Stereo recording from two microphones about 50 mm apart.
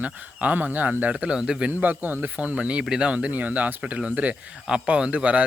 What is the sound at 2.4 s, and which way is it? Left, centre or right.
Speech, right.